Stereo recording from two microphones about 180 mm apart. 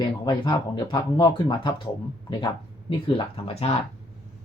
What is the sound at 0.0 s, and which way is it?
Speech, 25° left (ahead or behind).